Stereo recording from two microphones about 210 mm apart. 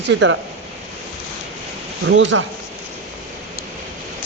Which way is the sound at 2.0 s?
60° right (ahead or behind).